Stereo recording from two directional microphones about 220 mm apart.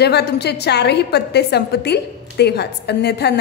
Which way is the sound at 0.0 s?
50° left (ahead or behind).